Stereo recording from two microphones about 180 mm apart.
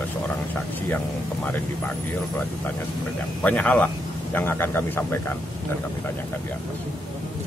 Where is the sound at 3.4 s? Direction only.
10° left (ahead or behind).